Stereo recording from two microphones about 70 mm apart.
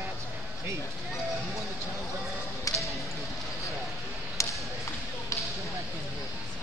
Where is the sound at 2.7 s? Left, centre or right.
Left.